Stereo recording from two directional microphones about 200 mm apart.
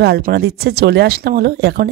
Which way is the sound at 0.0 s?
55° right (ahead or behind).